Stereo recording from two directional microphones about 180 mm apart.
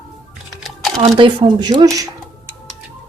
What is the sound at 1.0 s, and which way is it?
Speech, 35° right (ahead or behind).